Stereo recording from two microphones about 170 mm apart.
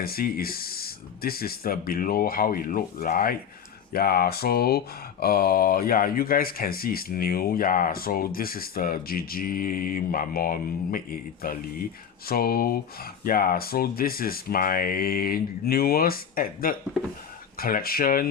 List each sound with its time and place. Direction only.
0.0 s speech: 60° left (ahead or behind)